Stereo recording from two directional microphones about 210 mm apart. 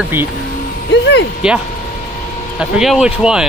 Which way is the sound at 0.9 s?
55° left (ahead or behind).